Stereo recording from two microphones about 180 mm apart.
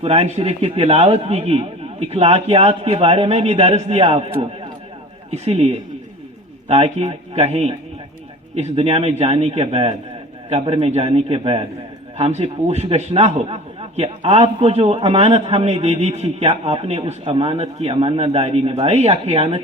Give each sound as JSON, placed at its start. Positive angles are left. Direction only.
{"t": 0.0, "sound": "a man's voice", "side_deg": -35}
{"t": 5.3, "sound": "a man's voice", "side_deg": -35}
{"t": 6.7, "sound": "a man's voice", "side_deg": -35}